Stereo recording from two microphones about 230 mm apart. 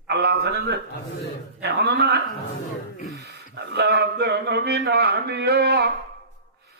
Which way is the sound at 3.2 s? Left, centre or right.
Right.